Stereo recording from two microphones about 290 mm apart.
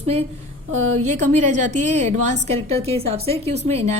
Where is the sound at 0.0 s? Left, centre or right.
Right.